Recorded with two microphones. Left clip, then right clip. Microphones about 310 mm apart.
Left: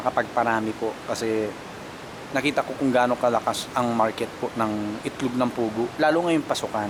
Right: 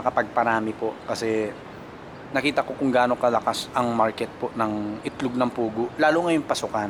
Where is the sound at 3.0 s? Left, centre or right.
Centre.